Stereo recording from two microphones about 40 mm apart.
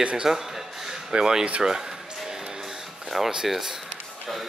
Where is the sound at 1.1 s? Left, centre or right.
Centre.